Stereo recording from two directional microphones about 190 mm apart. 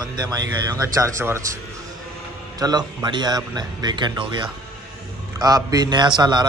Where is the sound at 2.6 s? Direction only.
20° right (ahead or behind).